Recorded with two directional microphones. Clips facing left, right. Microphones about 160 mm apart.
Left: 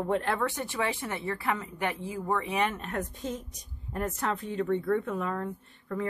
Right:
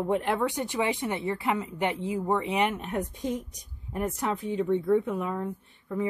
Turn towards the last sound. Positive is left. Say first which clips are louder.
# right 3 dB
turn(degrees=-10)  # may be behind; listen again after turning